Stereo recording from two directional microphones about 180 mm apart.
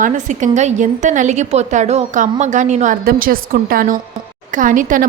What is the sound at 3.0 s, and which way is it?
A woman's voice, 55° right (ahead or behind).